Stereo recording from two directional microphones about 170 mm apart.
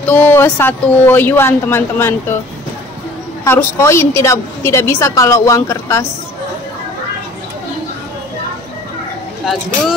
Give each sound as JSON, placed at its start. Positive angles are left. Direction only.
{"t": 0.0, "sound": "a woman's voice", "side_deg": 10}
{"t": 3.4, "sound": "a woman's voice", "side_deg": 15}